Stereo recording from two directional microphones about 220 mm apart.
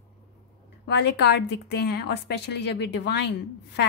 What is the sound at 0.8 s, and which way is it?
A woman's voice, 50° left (ahead or behind).